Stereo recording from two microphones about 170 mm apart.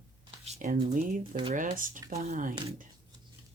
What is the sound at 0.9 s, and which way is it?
Speech, 50° right (ahead or behind).